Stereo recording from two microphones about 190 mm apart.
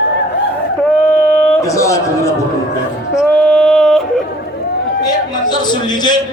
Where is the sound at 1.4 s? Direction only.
5° left (ahead or behind).